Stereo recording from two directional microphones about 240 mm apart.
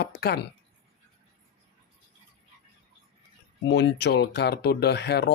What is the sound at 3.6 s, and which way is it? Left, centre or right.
Speech, left.